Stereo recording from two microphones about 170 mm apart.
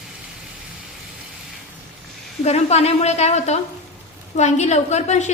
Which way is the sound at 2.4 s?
40° left (ahead or behind).